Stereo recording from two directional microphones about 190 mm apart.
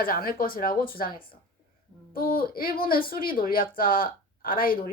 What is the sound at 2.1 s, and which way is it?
A woman's voice, 50° left (ahead or behind).